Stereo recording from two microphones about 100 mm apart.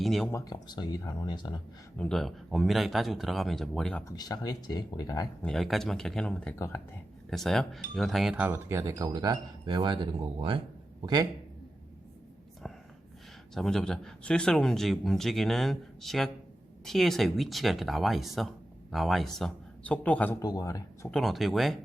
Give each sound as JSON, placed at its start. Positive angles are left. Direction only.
{"t": 0.0, "sound": "speech", "side_deg": 0}
{"t": 0.4, "sound": "speech", "side_deg": 45}
{"t": 2.0, "sound": "speech", "side_deg": 5}
{"t": 4.1, "sound": "speech", "side_deg": 40}
{"t": 5.4, "sound": "speech", "side_deg": 5}
{"t": 8.4, "sound": "speech", "side_deg": -25}
{"t": 11.0, "sound": "a man's voice", "side_deg": -45}
{"t": 13.5, "sound": "speech", "side_deg": 5}
{"t": 19.8, "sound": "a man's voice", "side_deg": 15}
{"t": 20.4, "sound": "speech", "side_deg": 40}
{"t": 21.1, "sound": "speech", "side_deg": 0}